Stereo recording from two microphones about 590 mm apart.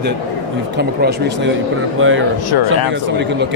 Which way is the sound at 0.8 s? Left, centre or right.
Centre.